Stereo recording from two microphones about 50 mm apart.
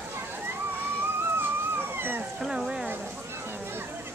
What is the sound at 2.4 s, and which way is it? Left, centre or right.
Speech, centre.